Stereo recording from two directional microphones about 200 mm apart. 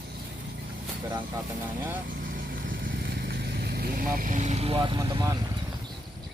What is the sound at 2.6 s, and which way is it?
Vehicle, 50° right (ahead or behind).